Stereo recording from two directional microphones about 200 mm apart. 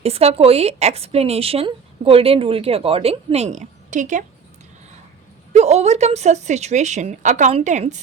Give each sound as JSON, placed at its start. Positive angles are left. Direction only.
{"t": 0.0, "sound": "a woman's voice", "side_deg": -30}
{"t": 5.5, "sound": "a woman's voice", "side_deg": -35}